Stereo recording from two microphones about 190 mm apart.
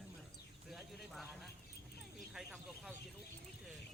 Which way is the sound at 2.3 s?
Centre (ahead or behind).